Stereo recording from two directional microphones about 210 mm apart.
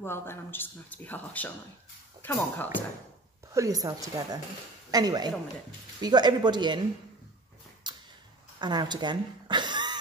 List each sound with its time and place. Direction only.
0.0 s speech: 10° left (ahead or behind)
3.5 s a woman's voice: 15° right (ahead or behind)
7.8 s a sound: 20° right (ahead or behind)
8.5 s a woman's voice: 20° right (ahead or behind)